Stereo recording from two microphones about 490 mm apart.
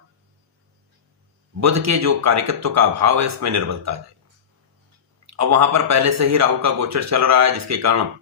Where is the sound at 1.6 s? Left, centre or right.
Right.